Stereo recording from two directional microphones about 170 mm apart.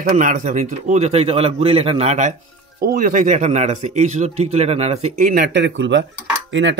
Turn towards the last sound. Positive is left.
turn(degrees=-90)